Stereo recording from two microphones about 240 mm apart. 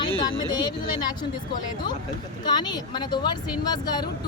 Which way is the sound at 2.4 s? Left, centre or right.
Centre.